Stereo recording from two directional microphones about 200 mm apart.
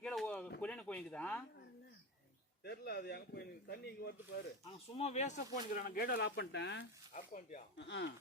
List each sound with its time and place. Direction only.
0.0 s a sound: 5° left (ahead or behind)
0.6 s speech: 5° left (ahead or behind)
2.6 s speech: 55° left (ahead or behind)
4.9 s speech: 35° left (ahead or behind); by 6.8 s 60° left (ahead or behind)
7.1 s speech: 40° left (ahead or behind)
7.8 s speech: 60° left (ahead or behind)